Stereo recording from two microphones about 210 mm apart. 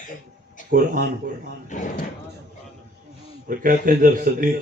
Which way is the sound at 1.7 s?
35° left (ahead or behind).